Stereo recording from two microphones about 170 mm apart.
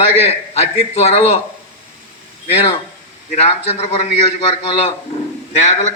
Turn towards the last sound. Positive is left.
turn(degrees=40)  # may be behind; listen again after turning